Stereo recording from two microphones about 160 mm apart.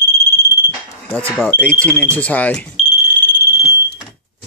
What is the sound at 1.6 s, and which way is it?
Speech, 10° left (ahead or behind).